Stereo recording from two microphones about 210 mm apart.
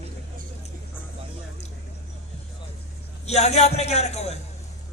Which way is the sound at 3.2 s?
30° left (ahead or behind).